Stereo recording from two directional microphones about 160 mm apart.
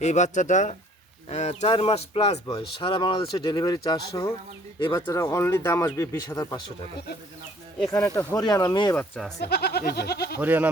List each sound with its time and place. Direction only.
0.0 s speech: 45° left (ahead or behind); by 6.6 s 20° left (ahead or behind)
7.8 s speech: 20° left (ahead or behind)
9.4 s a sound: 90° left
10.4 s speech: 10° right (ahead or behind)